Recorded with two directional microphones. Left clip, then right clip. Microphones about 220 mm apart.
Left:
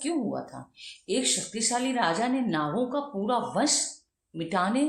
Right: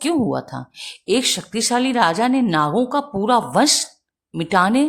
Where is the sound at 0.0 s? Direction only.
45° right (ahead or behind).